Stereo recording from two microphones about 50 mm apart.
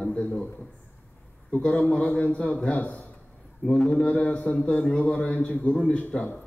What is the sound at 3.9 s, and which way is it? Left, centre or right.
A man's voice, left.